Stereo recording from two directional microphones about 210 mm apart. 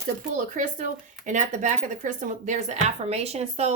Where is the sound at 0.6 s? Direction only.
35° right (ahead or behind).